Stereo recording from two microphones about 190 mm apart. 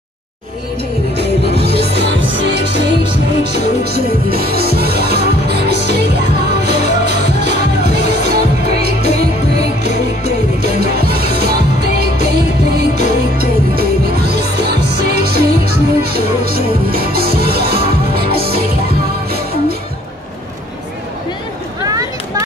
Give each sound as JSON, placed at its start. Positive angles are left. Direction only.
{"t": 1.5, "sound": "music", "side_deg": -60}